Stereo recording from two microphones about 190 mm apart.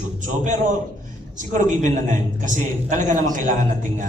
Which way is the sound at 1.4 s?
40° right (ahead or behind).